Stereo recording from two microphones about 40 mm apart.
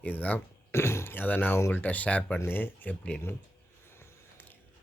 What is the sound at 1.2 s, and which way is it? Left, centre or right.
Speech, left.